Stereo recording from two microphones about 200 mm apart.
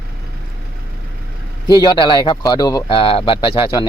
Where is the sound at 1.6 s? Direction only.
20° left (ahead or behind).